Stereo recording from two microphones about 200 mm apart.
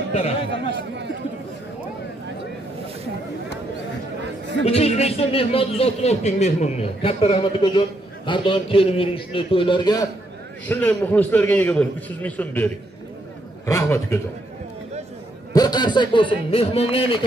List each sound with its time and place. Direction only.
0.1 s speech: 30° left (ahead or behind)
0.7 s chatter: 60° right (ahead or behind)
4.6 s a man's voice: 30° left (ahead or behind)
10.7 s a man's voice: 10° left (ahead or behind)
15.5 s a man's voice: 20° left (ahead or behind)